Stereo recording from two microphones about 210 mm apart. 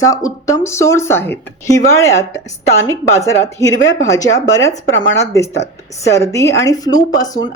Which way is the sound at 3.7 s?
65° left (ahead or behind).